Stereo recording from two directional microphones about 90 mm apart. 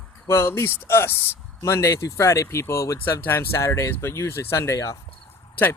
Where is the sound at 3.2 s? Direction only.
25° left (ahead or behind).